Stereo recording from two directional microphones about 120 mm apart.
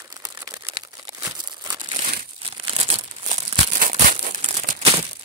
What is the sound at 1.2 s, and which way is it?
Crumpling, 30° right (ahead or behind).